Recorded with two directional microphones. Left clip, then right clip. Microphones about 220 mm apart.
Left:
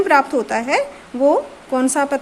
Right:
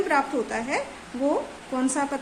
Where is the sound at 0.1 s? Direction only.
45° left (ahead or behind).